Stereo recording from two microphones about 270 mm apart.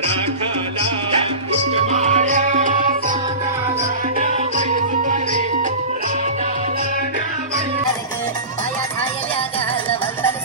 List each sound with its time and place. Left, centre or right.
1.5 s music: right
4.2 s music: right